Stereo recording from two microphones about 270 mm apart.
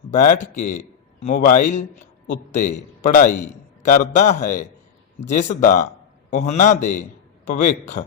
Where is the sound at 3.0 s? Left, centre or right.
Left.